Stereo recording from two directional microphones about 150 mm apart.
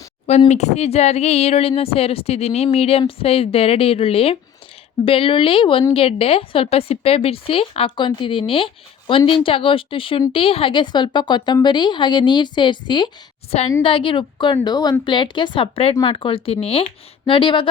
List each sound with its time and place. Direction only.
0.3 s speech: 50° left (ahead or behind)